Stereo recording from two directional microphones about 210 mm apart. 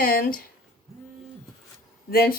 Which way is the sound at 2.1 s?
45° left (ahead or behind).